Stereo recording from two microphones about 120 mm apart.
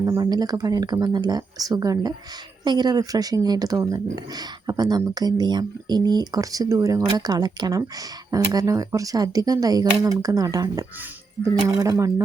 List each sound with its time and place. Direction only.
0.1 s speech: 30° right (ahead or behind)